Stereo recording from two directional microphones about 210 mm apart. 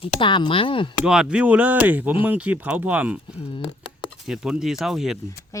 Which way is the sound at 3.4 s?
25° left (ahead or behind).